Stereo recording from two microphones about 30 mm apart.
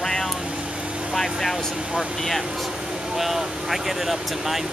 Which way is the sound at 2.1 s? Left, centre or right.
Centre.